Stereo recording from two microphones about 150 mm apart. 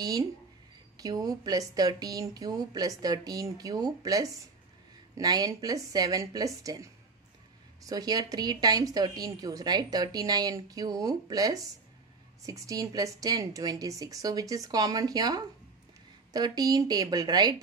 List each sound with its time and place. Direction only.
0.9 s a woman's voice: 25° right (ahead or behind)